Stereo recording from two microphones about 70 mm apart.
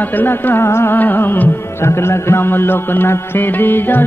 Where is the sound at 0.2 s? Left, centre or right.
Left.